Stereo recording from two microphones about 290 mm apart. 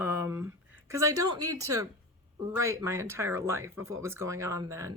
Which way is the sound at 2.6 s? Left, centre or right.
Centre.